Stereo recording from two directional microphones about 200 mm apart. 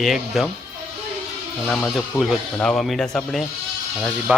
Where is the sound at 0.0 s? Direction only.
Centre (ahead or behind).